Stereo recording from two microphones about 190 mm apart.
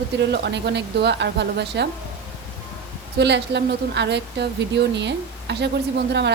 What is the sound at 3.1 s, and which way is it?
Speech, 65° right (ahead or behind).